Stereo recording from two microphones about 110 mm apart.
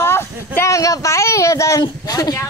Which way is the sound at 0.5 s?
30° left (ahead or behind).